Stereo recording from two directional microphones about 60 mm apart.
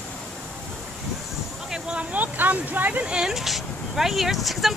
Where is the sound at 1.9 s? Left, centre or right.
Right.